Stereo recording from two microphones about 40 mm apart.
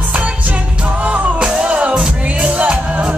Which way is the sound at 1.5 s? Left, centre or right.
Right.